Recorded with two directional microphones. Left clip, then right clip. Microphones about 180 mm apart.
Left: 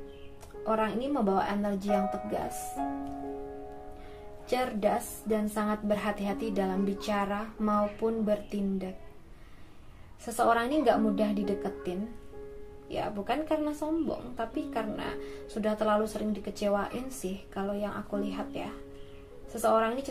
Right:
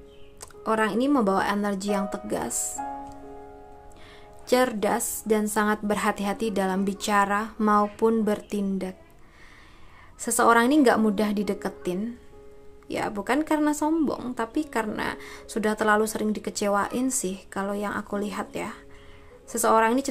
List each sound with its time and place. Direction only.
0.7 s a woman's voice: 45° right (ahead or behind)
4.5 s a woman's voice: 40° right (ahead or behind)
10.2 s a woman's voice: 40° right (ahead or behind)